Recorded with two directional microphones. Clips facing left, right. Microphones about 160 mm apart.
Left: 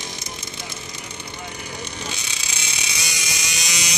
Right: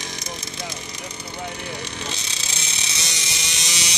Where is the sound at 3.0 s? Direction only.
25° right (ahead or behind).